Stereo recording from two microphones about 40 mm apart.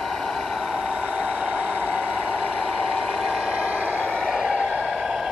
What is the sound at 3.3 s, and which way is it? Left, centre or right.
Vehicle, right.